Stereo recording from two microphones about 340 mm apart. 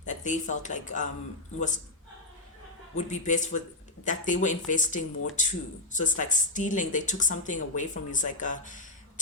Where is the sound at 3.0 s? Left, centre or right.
Left.